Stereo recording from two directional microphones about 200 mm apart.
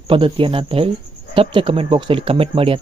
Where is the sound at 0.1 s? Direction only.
25° right (ahead or behind).